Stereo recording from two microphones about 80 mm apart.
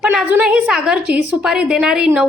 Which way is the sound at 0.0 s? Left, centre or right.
Centre.